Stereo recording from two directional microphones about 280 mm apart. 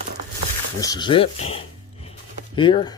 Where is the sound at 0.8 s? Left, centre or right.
Centre.